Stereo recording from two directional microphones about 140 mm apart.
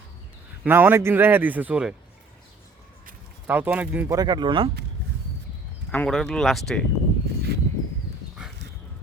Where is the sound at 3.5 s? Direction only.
10° right (ahead or behind).